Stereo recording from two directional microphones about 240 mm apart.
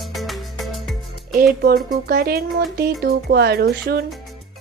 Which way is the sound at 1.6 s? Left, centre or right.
Right.